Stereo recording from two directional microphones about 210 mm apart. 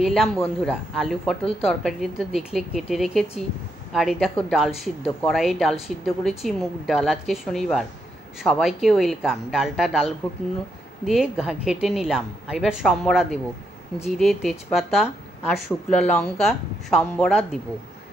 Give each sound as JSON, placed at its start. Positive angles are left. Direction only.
{"t": 0.0, "sound": "a woman's voice", "side_deg": 0}
{"t": 11.1, "sound": "a woman's voice", "side_deg": -5}